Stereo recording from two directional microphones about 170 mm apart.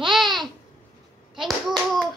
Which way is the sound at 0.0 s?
Centre (ahead or behind).